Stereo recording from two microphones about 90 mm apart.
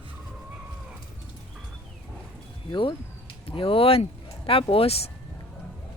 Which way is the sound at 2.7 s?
70° left (ahead or behind).